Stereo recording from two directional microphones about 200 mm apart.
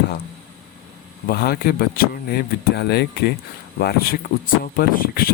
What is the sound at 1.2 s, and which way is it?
Speech, 50° left (ahead or behind).